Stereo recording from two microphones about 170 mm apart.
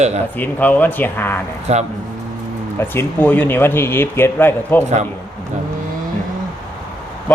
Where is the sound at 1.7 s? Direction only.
40° right (ahead or behind).